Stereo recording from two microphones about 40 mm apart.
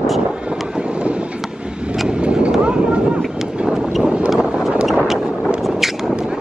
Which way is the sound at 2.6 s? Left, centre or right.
Right.